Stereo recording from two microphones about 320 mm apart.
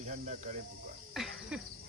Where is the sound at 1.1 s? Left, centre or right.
Centre.